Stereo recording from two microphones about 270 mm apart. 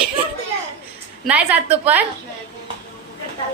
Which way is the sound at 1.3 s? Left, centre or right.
Centre.